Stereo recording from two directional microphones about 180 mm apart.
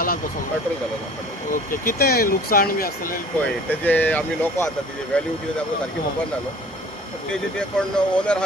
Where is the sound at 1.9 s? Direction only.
55° left (ahead or behind).